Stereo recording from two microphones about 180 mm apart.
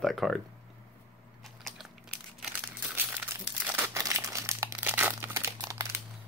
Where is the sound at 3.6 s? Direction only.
15° right (ahead or behind).